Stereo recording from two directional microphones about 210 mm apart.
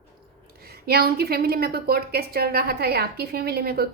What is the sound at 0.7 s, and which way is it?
A woman's voice, 45° right (ahead or behind).